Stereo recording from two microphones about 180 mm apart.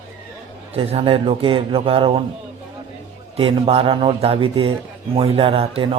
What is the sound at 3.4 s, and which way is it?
Speech, 30° right (ahead or behind).